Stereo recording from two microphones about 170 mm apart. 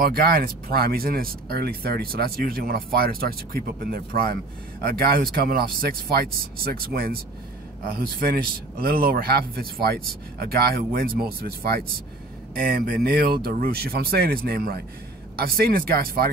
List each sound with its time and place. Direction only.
0.1 s speech: 60° right (ahead or behind)
8.7 s speech: 60° right (ahead or behind)
12.5 s speech: 60° right (ahead or behind)